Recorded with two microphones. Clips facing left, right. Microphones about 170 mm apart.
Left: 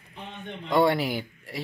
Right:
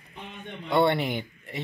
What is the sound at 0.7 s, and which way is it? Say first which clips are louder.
Speech: left 1 dB; 5° left (ahead or behind).